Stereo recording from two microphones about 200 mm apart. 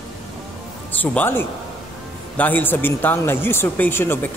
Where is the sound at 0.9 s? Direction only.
10° left (ahead or behind).